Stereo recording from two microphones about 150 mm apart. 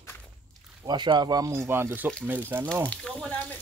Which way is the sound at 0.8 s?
30° right (ahead or behind).